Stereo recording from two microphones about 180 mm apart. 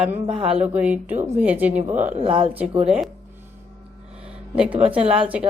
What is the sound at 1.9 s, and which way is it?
Speech, 35° right (ahead or behind).